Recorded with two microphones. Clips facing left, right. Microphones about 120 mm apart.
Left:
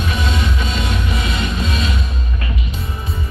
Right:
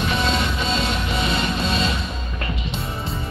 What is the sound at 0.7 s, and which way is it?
Music, 30° right (ahead or behind).